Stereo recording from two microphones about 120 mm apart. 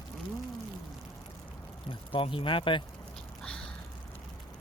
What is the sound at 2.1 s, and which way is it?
Speech, 50° left (ahead or behind).